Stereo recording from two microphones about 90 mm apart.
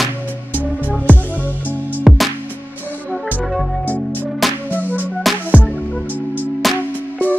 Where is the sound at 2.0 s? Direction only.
Centre (ahead or behind).